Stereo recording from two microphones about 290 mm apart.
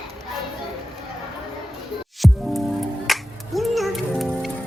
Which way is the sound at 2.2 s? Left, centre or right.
Centre.